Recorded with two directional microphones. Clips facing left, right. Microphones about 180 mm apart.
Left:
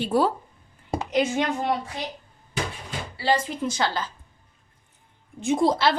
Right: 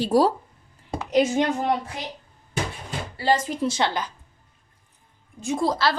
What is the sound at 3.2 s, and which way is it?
Speech, 45° right (ahead or behind).